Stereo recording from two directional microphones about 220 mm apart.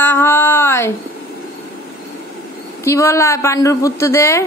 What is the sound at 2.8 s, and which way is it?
Speech, 15° left (ahead or behind).